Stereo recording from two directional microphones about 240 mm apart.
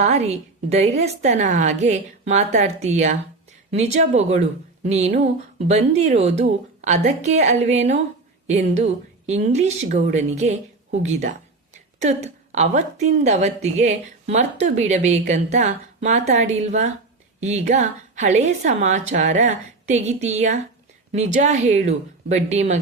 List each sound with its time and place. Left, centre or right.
0.0 s speech: right